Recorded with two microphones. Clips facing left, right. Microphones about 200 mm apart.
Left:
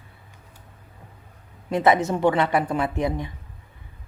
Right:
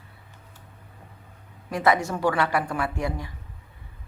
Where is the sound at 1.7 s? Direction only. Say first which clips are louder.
Left 3 dB; 20° left (ahead or behind).